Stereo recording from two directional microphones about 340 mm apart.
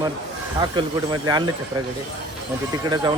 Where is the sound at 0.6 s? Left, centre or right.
Centre.